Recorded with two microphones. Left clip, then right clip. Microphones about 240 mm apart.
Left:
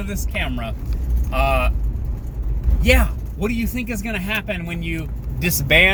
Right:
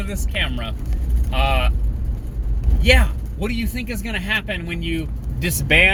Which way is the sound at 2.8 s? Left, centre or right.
Centre.